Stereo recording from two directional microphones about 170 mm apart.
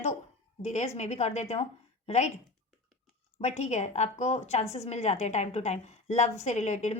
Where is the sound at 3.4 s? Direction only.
40° left (ahead or behind).